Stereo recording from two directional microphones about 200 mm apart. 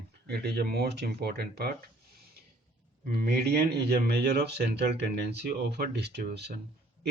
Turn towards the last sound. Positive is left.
turn(degrees=-55)  # may be behind; listen again after turning